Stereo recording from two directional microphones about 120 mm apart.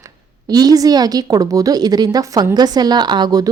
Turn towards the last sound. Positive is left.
turn(degrees=-35)  # may be behind; listen again after turning